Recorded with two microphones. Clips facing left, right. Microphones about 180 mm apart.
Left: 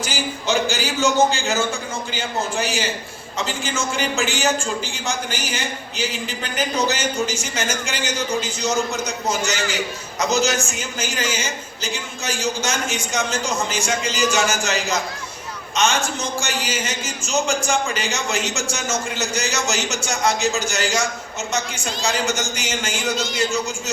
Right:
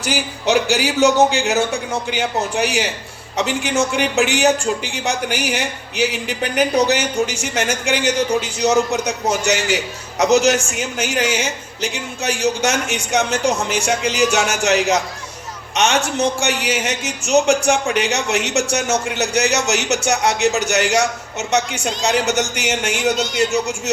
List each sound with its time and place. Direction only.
0.0 s a man's voice: 65° right (ahead or behind)
23.2 s speech: centre (ahead or behind)
23.5 s a man's voice: 70° right (ahead or behind)